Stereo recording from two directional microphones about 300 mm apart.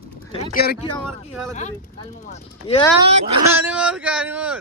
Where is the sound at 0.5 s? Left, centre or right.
Left.